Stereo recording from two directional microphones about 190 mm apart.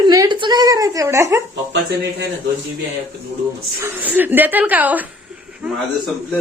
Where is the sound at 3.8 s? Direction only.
10° right (ahead or behind).